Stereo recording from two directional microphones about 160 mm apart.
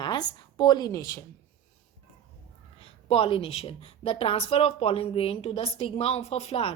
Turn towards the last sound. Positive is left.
turn(degrees=40)  # may be behind; listen again after turning